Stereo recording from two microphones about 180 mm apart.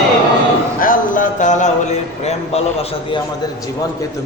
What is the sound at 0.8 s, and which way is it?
Speech, 50° left (ahead or behind).